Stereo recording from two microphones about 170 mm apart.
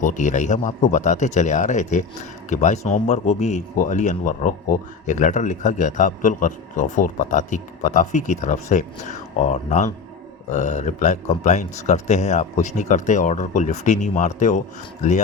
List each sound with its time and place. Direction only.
0.0 s speech: 45° left (ahead or behind)